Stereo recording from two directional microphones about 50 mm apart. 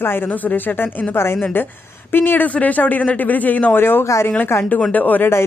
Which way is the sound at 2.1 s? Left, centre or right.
Left.